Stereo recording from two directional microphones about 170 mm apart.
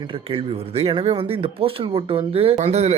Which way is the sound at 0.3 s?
35° right (ahead or behind).